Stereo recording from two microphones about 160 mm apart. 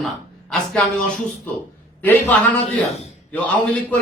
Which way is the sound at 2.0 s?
10° left (ahead or behind).